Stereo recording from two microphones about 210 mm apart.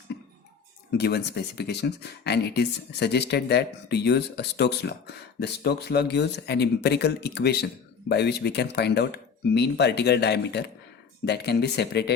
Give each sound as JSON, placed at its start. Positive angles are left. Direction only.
{"t": 0.9, "sound": "speech", "side_deg": 50}